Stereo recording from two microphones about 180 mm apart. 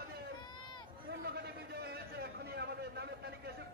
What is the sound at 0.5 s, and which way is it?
Run, 25° left (ahead or behind).